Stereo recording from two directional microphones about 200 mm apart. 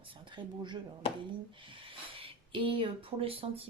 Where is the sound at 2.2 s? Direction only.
25° right (ahead or behind).